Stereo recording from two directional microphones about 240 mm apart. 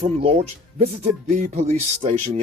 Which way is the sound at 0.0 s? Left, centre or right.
Right.